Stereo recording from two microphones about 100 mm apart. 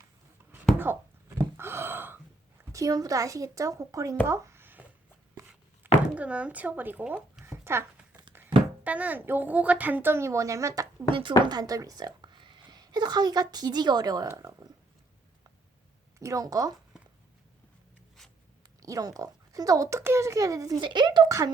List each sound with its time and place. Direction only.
1.4 s a sound: 25° right (ahead or behind)
2.7 s speech: 35° right (ahead or behind)
4.3 s a sound: 25° right (ahead or behind)
5.4 s chopping: 35° right (ahead or behind)
6.1 s speech: 15° right (ahead or behind)
7.4 s a sound: 25° right (ahead or behind)
8.8 s a woman's voice: 15° right (ahead or behind); by 10.8 s 30° right (ahead or behind)
11.1 s speech: 55° right (ahead or behind); by 14.3 s 40° right (ahead or behind)
16.1 s speech: 30° right (ahead or behind)
18.2 s writing: 5° left (ahead or behind)
18.8 s speech: 35° right (ahead or behind)
20.8 s speech: 50° right (ahead or behind)
21.2 s speech: 30° right (ahead or behind)